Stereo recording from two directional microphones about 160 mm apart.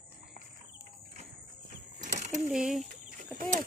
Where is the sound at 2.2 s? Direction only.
45° right (ahead or behind).